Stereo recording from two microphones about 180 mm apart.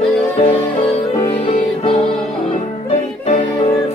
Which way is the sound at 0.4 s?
35° left (ahead or behind).